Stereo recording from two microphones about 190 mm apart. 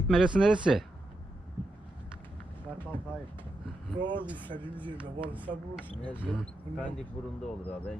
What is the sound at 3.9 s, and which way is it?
Speech, 25° right (ahead or behind).